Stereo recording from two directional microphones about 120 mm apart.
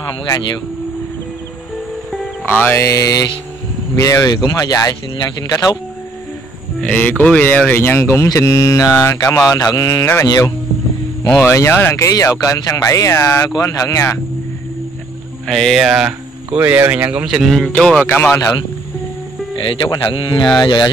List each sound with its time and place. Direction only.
2.4 s speech: 15° left (ahead or behind)
6.8 s speech: 10° left (ahead or behind); by 10.1 s 30° left (ahead or behind)
11.2 s speech: 20° left (ahead or behind)
15.4 s speech: centre (ahead or behind)
18.0 s speech: 20° left (ahead or behind)
19.5 s speech: 45° left (ahead or behind)